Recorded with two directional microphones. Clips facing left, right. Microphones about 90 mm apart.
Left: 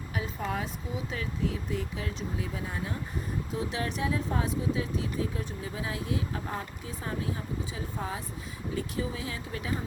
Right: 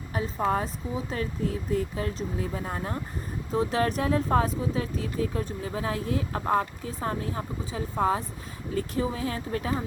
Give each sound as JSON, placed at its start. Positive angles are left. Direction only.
{"t": 0.1, "sound": "speech", "side_deg": -35}
{"t": 6.4, "sound": "speech", "side_deg": -55}
{"t": 6.8, "sound": "speech", "side_deg": -45}